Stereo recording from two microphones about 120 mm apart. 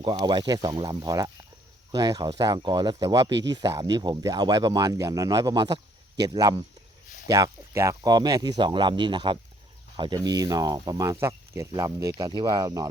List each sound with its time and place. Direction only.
0.0 s speech: 40° right (ahead or behind)